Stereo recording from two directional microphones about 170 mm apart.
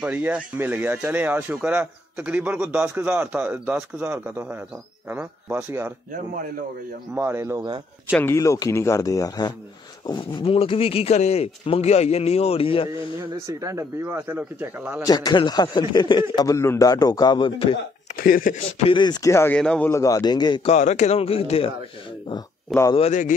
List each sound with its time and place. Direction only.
0.0 s speech: 10° right (ahead or behind)
7.2 s speech: 15° right (ahead or behind)
8.1 s speech: 15° left (ahead or behind); by 12.9 s 35° left (ahead or behind)
13.5 s speech: 20° right (ahead or behind)
15.0 s speech: 25° left (ahead or behind)
18.1 s speech: 55° left (ahead or behind)
18.9 s speech: 25° left (ahead or behind); by 19.9 s 5° left (ahead or behind)
19.9 s speech: 20° left (ahead or behind)
20.7 s speech: 45° left (ahead or behind)
22.9 s speech: 45° left (ahead or behind)